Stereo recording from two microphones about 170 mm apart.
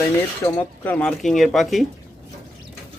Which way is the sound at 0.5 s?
10° left (ahead or behind).